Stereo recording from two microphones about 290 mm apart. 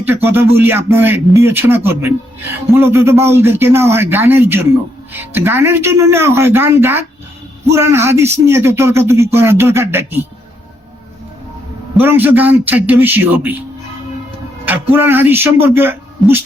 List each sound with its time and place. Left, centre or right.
0.0 s a man's voice: centre
11.9 s a man's voice: centre
14.6 s a man's voice: centre